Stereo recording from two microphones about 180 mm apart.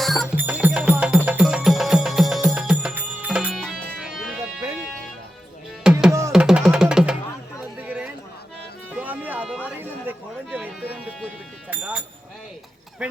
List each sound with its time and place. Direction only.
0.0 s music: centre (ahead or behind)
5.8 s music: 5° right (ahead or behind)
6.1 s music: 15° right (ahead or behind)
6.3 s music: 5° right (ahead or behind)
7.9 s chatter: 10° right (ahead or behind)
8.9 s music: 10° right (ahead or behind)
11.7 s sheep: 5° right (ahead or behind)
13.0 s a sound: 5° right (ahead or behind)